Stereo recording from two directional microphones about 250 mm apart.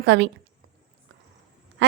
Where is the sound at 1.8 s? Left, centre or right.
Right.